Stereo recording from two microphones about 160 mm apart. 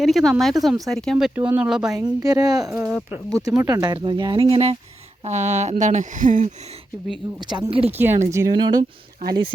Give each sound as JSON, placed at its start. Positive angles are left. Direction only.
{"t": 0.0, "sound": "speech", "side_deg": 0}
{"t": 2.0, "sound": "speech", "side_deg": -20}
{"t": 2.9, "sound": "speech", "side_deg": 0}
{"t": 3.6, "sound": "speech", "side_deg": -25}
{"t": 7.3, "sound": "speech", "side_deg": -25}
{"t": 7.9, "sound": "speech", "side_deg": -15}